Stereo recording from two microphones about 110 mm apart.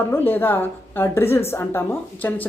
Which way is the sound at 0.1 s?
20° left (ahead or behind).